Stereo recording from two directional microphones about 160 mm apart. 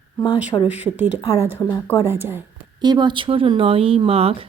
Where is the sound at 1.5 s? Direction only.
15° left (ahead or behind).